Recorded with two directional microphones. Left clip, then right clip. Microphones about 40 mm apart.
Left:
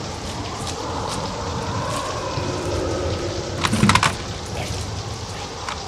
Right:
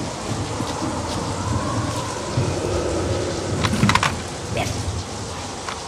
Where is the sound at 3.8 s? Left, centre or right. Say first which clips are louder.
Left 2 dB; right.